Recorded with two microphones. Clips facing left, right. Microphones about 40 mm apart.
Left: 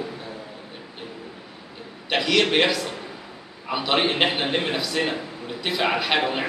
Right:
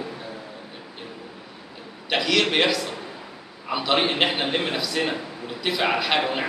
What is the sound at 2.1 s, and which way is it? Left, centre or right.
A man's voice, centre.